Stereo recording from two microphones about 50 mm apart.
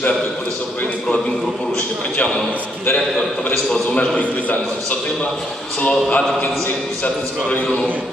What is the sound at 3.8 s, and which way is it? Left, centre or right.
A man's voice, left.